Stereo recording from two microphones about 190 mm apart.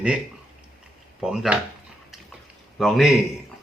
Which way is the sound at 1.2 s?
Centre (ahead or behind).